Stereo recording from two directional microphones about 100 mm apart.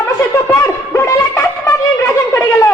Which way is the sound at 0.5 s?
25° left (ahead or behind).